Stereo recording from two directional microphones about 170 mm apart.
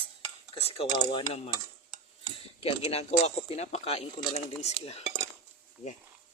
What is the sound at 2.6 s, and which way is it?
Speech, 35° left (ahead or behind).